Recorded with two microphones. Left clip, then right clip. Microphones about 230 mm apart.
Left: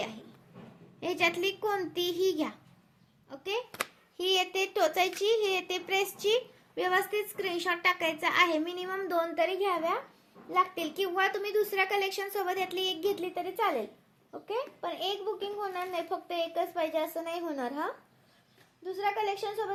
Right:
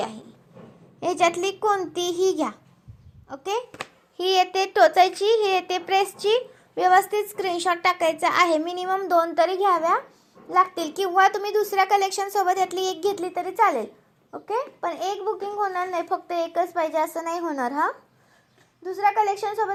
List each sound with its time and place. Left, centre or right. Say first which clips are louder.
0.9 s a child's voice: right 8 dB; right